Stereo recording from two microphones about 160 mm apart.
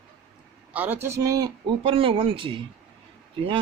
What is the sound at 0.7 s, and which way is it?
Speech, 10° right (ahead or behind).